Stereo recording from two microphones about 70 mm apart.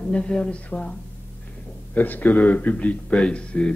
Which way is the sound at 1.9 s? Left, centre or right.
Left.